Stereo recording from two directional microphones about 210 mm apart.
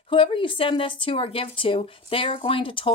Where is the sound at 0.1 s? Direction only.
25° left (ahead or behind).